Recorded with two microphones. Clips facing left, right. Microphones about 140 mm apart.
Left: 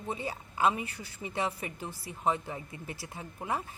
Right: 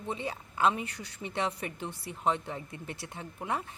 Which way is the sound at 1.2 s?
5° left (ahead or behind).